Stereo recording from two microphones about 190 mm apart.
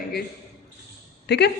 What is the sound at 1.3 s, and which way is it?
Speech, 60° left (ahead or behind).